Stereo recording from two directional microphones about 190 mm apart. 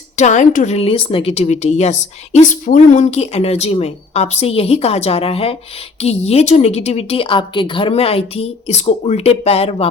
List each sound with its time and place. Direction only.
0.2 s a woman's voice: 40° left (ahead or behind)